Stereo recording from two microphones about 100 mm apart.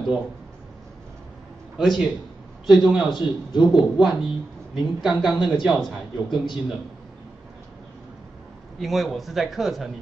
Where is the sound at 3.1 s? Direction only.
50° left (ahead or behind).